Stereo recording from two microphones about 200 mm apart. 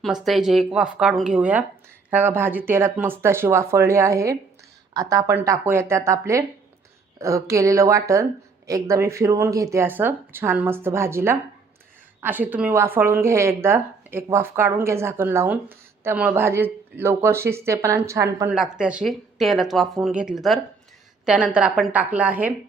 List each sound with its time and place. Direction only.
0.0 s speech: centre (ahead or behind)
18.5 s speech: 5° right (ahead or behind)